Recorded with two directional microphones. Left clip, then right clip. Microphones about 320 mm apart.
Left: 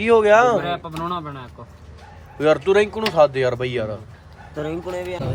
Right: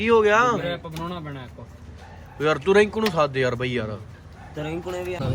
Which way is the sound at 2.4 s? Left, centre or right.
Centre.